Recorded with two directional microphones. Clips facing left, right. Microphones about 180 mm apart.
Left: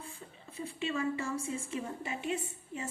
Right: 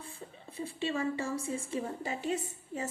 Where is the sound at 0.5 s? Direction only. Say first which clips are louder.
Right 1 dB; 35° right (ahead or behind).